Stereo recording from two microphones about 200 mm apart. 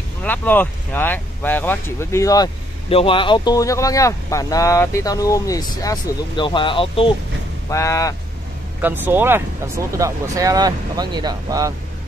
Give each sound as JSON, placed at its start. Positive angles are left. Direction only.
{"t": 0.2, "sound": "speech", "side_deg": 10}
{"t": 7.7, "sound": "speech", "side_deg": 15}
{"t": 8.8, "sound": "speech", "side_deg": -10}